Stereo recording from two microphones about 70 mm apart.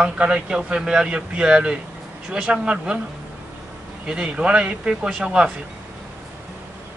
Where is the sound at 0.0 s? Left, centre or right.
Centre.